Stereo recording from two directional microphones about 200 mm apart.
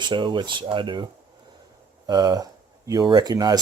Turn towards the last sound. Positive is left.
turn(degrees=-20)  # may be behind; listen again after turning